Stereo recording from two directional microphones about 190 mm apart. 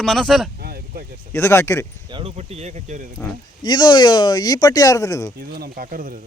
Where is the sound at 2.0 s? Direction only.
30° right (ahead or behind).